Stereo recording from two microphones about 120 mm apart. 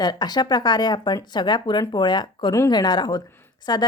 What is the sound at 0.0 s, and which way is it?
A woman's voice, 35° left (ahead or behind).